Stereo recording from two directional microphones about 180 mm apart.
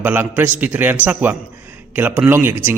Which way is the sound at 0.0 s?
10° right (ahead or behind).